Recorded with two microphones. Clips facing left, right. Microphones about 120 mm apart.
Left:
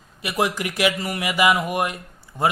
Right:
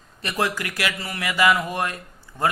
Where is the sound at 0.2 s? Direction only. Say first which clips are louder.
Left 2 dB; 15° left (ahead or behind).